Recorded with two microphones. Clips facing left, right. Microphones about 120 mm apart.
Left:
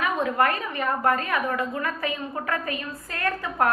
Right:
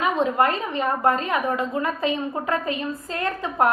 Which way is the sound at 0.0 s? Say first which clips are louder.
Right 3 dB; 25° right (ahead or behind).